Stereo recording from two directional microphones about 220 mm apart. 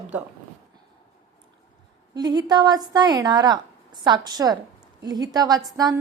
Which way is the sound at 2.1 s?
20° right (ahead or behind).